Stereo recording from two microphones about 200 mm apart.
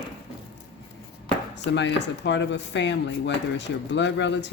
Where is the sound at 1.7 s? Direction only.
60° left (ahead or behind).